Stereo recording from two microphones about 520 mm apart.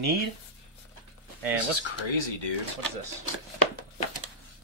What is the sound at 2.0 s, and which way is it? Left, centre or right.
Speech, left.